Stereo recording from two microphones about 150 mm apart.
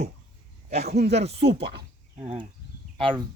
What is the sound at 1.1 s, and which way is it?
Speech, 40° right (ahead or behind).